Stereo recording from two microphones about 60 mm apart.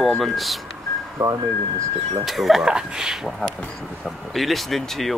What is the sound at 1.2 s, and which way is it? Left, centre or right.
Speech, right.